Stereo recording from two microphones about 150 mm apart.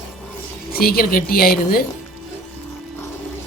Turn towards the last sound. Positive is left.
turn(degrees=85)